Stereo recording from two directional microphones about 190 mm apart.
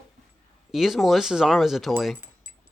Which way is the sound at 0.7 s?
Centre (ahead or behind).